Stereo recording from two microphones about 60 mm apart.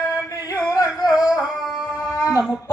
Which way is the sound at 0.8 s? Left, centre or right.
Left.